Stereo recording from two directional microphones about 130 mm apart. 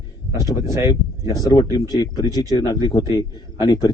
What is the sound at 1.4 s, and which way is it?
A man's voice, 30° left (ahead or behind).